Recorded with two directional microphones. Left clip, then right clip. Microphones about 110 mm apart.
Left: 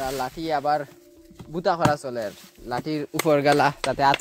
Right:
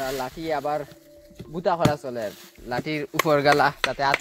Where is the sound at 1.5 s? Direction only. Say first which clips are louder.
Even; 45° left (ahead or behind).